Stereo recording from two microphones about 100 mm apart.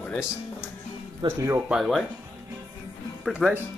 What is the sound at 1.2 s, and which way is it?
Speech, 55° right (ahead or behind).